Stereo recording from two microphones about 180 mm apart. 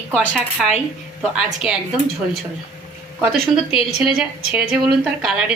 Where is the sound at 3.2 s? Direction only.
5° right (ahead or behind).